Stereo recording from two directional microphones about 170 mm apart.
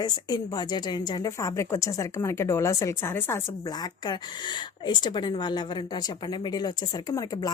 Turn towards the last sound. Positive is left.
turn(degrees=20)  # may be behind; listen again after turning